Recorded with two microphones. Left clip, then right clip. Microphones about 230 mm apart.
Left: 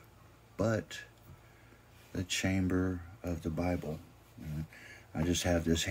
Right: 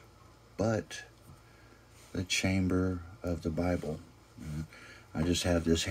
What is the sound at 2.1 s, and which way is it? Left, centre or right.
Speech, centre.